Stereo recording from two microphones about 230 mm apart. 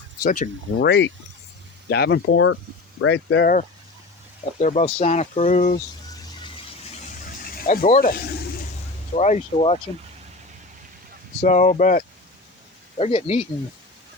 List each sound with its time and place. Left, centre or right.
0.2 s speech: left
0.9 s speech: left
4.6 s speech: left
7.1 s a sound: left
9.1 s speech: left
11.4 s speech: left